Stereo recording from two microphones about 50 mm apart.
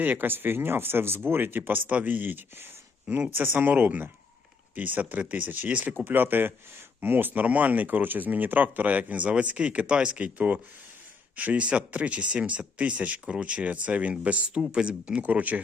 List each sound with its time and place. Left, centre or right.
0.0 s speech: right
6.1 s speech: right; by 14.9 s centre
15.2 s speech: right